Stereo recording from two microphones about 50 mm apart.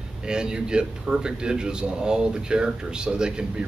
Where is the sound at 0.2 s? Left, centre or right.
Centre.